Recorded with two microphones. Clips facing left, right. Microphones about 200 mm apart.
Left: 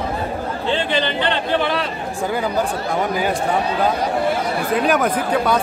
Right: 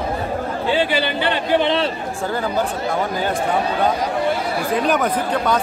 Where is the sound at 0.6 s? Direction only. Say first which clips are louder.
Right 1 dB; 10° right (ahead or behind).